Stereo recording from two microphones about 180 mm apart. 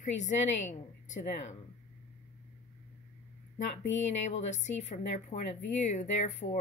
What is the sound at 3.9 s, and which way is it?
A woman's voice, 40° left (ahead or behind).